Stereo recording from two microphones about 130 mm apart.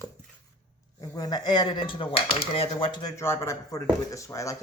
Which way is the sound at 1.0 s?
30° left (ahead or behind).